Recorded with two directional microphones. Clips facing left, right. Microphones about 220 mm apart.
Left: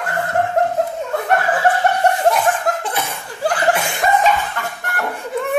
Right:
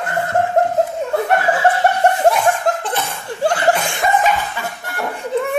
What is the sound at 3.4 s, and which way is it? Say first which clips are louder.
Chuckle: right 2 dB; 25° right (ahead or behind).